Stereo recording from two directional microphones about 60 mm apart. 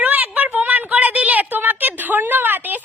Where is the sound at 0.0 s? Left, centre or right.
Right.